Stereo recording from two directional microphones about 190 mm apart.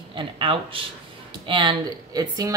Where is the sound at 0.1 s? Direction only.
25° right (ahead or behind).